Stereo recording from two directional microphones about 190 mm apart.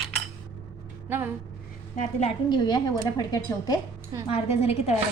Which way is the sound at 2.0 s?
40° left (ahead or behind).